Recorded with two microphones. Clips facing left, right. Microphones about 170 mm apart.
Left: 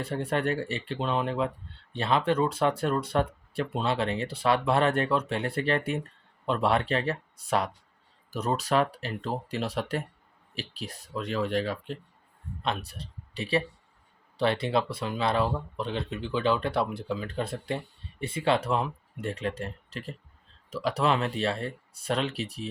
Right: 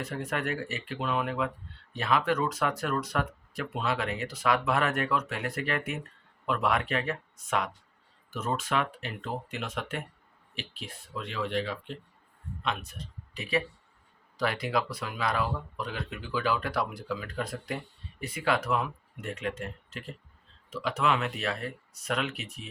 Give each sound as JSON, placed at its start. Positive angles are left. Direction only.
{"t": 0.0, "sound": "speech", "side_deg": 30}